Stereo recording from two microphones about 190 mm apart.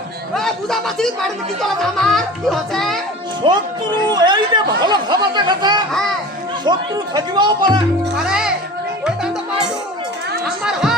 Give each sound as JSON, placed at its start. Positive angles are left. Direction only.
{"t": 0.3, "sound": "speech", "side_deg": 0}
{"t": 4.1, "sound": "speech", "side_deg": -25}
{"t": 8.1, "sound": "speech", "side_deg": -5}
{"t": 10.6, "sound": "music", "side_deg": 0}